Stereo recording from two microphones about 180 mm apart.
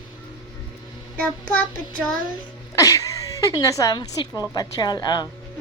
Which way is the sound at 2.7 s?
15° left (ahead or behind).